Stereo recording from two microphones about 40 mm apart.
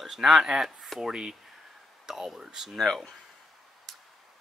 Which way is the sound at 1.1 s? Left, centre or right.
Right.